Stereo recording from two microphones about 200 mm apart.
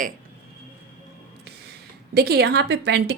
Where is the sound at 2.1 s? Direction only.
50° right (ahead or behind).